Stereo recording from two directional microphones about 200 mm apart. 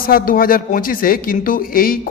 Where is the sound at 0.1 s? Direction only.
45° left (ahead or behind).